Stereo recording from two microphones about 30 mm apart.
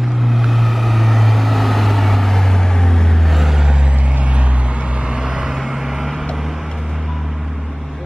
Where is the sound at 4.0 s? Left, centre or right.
Right.